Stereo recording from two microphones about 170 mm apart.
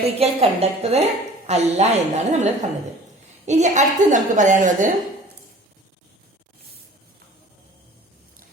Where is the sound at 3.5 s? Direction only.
45° right (ahead or behind).